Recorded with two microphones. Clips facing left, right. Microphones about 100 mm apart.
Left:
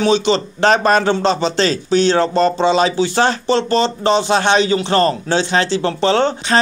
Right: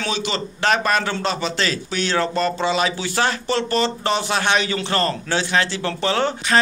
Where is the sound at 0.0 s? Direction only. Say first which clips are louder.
Left 10 dB; 25° left (ahead or behind).